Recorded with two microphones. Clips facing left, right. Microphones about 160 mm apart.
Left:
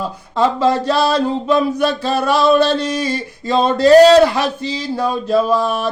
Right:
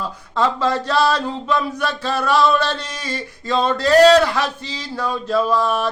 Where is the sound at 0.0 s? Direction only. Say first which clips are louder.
Left 4 dB; 10° left (ahead or behind).